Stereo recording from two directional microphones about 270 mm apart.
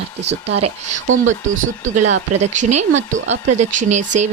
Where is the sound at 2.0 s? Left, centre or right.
Right.